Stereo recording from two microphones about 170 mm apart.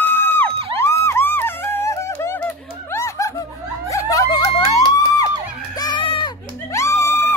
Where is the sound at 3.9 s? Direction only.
20° left (ahead or behind).